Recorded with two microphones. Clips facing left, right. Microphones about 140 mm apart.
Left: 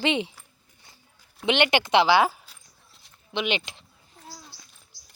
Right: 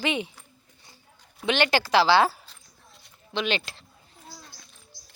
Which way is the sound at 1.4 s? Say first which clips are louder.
Left 1 dB; 20° left (ahead or behind).